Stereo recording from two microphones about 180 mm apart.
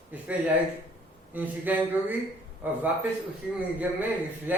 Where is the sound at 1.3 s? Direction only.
10° right (ahead or behind).